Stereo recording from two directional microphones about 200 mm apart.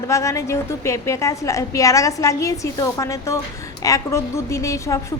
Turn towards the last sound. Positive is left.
turn(degrees=15)  # may be behind; listen again after turning